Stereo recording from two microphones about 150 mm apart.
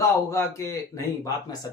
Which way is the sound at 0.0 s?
20° left (ahead or behind).